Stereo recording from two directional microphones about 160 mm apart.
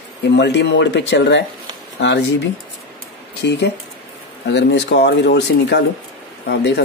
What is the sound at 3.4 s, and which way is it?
Speech, 90° left.